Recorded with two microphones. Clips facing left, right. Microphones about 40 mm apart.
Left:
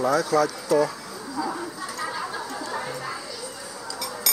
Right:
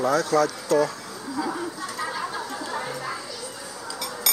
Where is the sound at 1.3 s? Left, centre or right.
Centre.